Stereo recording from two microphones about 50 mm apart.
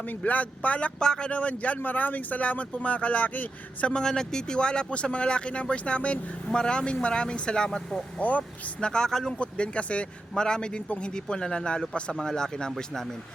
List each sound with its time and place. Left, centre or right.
0.2 s speech: left
3.9 s speech: centre
8.2 s speech: left
8.9 s a man's voice: centre
9.4 s a man's voice: left